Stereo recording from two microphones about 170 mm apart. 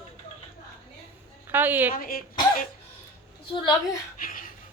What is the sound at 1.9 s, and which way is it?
Speech, 55° left (ahead or behind).